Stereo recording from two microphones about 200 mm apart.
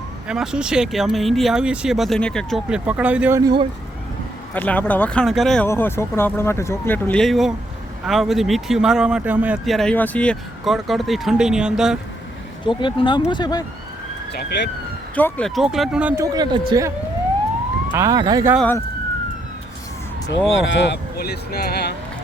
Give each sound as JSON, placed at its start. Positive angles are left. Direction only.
{"t": 0.3, "sound": "speech", "side_deg": -5}
{"t": 4.5, "sound": "speech", "side_deg": 10}
{"t": 5.6, "sound": "speech", "side_deg": 10}
{"t": 12.6, "sound": "speech", "side_deg": 25}
{"t": 14.3, "sound": "speech", "side_deg": 60}
{"t": 15.1, "sound": "speech", "side_deg": 5}
{"t": 17.9, "sound": "speech", "side_deg": -15}
{"t": 18.5, "sound": "speech", "side_deg": 5}
{"t": 20.5, "sound": "speech", "side_deg": 65}